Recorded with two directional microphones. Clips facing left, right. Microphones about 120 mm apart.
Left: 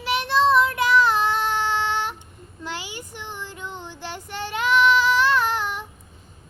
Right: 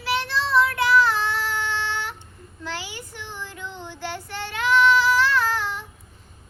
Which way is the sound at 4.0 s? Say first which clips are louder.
Right 1 dB; 20° left (ahead or behind).